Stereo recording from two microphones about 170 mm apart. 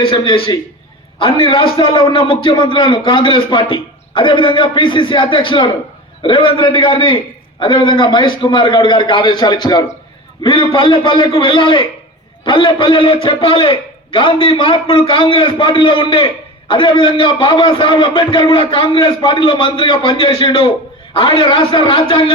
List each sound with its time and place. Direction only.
0.0 s a man's voice: 30° left (ahead or behind)